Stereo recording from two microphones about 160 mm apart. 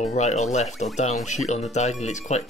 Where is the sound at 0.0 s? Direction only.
45° left (ahead or behind).